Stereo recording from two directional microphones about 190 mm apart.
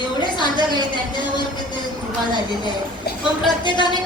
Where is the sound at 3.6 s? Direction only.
25° left (ahead or behind).